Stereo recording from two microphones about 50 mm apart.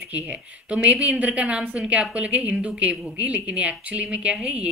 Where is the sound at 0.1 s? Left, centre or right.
Right.